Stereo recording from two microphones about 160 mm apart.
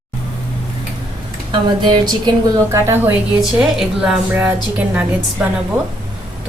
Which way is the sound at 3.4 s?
5° right (ahead or behind).